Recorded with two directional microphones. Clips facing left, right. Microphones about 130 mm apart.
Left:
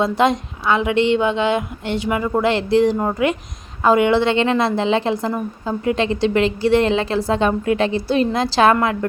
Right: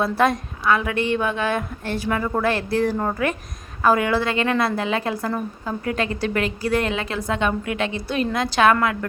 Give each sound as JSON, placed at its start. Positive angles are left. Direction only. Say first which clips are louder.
{"t": 0.0, "sound": "a woman's voice", "louder": "left 3 dB", "side_deg": 20}